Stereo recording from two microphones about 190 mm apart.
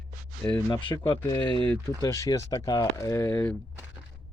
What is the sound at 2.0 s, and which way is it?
Speech, 15° left (ahead or behind).